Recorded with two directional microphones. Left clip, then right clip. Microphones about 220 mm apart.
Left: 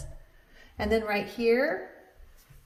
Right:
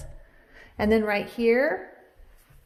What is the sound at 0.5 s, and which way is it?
A woman's voice, 45° right (ahead or behind).